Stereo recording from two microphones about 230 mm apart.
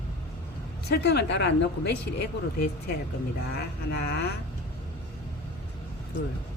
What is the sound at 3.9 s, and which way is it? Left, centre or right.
Speech, left.